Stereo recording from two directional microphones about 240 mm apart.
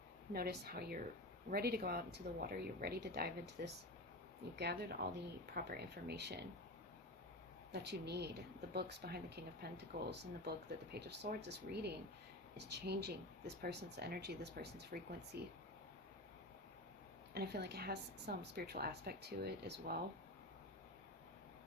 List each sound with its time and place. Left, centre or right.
0.3 s a woman's voice: right
7.7 s speech: right
17.3 s a woman's voice: right